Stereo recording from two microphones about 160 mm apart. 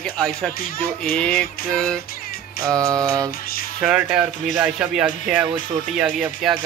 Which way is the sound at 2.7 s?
20° right (ahead or behind).